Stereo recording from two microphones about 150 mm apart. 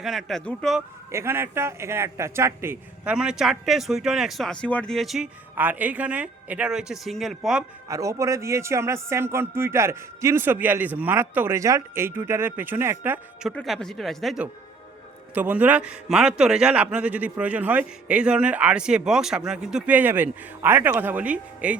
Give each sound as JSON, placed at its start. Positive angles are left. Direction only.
{"t": 0.0, "sound": "a man's voice", "side_deg": 0}
{"t": 1.1, "sound": "a man's voice", "side_deg": -15}
{"t": 7.9, "sound": "a man's voice", "side_deg": -20}
{"t": 13.5, "sound": "a man's voice", "side_deg": 5}
{"t": 15.4, "sound": "a man's voice", "side_deg": -10}